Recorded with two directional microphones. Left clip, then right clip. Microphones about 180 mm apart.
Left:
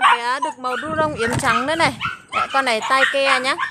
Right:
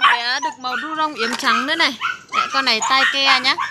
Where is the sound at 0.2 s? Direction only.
25° left (ahead or behind).